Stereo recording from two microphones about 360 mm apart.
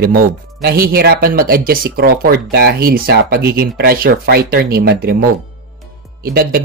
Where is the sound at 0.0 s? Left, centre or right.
Right.